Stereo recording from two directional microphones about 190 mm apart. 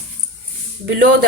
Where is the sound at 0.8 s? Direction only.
65° right (ahead or behind).